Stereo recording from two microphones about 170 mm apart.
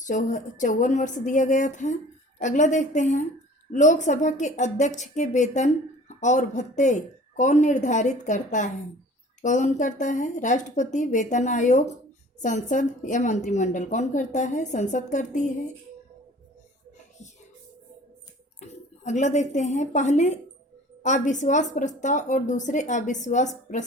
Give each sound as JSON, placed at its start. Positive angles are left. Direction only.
{"t": 0.0, "sound": "a woman's voice", "side_deg": 50}
{"t": 18.6, "sound": "a woman's voice", "side_deg": 45}